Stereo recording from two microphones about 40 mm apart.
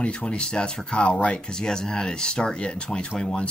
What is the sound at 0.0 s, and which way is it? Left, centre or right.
Speech, left.